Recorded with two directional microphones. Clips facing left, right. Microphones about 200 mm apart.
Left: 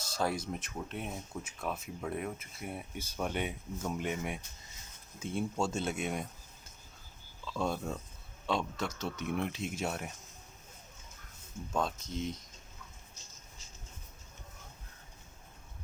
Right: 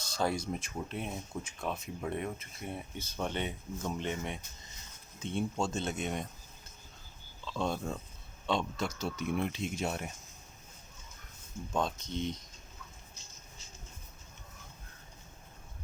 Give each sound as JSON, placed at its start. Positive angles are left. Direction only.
{"t": 0.2, "sound": "speech", "side_deg": 5}
{"t": 7.4, "sound": "speech", "side_deg": 5}
{"t": 11.7, "sound": "speech", "side_deg": 5}